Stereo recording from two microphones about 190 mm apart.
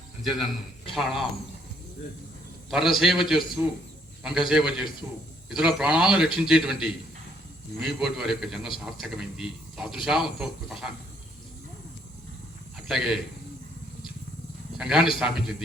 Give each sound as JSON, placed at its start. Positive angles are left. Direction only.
{"t": 0.2, "sound": "speech", "side_deg": 0}
{"t": 2.6, "sound": "speech", "side_deg": 0}
{"t": 12.7, "sound": "a sound", "side_deg": 0}
{"t": 14.8, "sound": "speech", "side_deg": -5}